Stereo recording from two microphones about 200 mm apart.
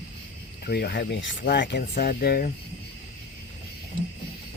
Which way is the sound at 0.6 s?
50° left (ahead or behind).